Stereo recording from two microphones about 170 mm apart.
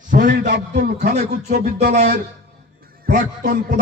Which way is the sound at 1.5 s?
75° right (ahead or behind).